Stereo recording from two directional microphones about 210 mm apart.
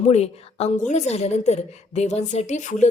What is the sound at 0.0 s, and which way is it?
A woman's voice, 30° left (ahead or behind).